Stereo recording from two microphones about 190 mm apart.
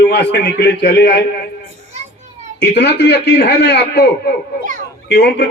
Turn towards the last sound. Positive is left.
turn(degrees=65)  # may be behind; listen again after turning